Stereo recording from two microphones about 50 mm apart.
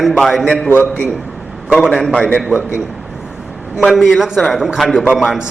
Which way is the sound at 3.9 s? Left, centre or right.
Centre.